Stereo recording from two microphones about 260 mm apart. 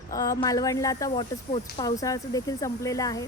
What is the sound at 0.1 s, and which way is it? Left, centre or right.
Speech, centre.